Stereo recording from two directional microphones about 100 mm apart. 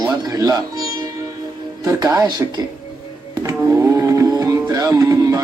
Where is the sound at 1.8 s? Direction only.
35° right (ahead or behind).